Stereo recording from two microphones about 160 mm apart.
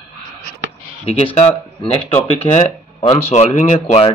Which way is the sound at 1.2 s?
40° left (ahead or behind).